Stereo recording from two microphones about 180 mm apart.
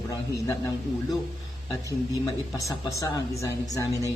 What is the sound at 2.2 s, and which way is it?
Speech, 15° left (ahead or behind).